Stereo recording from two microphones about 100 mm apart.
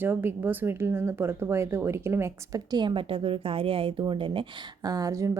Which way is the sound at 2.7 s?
50° right (ahead or behind).